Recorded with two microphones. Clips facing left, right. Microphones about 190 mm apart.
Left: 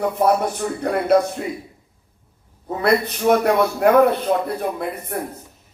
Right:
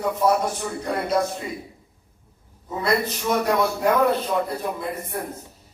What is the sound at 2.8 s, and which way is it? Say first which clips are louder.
A man's voice: left 6 dB; 60° left (ahead or behind).